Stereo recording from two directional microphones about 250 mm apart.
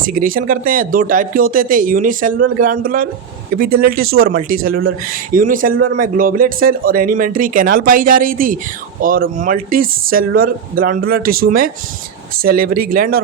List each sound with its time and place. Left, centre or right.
0.0 s speech: right